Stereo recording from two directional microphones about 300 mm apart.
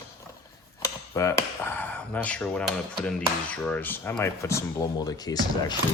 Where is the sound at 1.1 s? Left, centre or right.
Centre.